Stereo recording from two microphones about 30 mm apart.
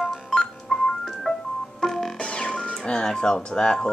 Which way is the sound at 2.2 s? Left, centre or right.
Left.